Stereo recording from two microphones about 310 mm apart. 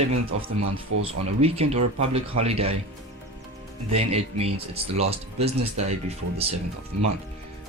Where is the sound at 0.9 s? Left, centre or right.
Right.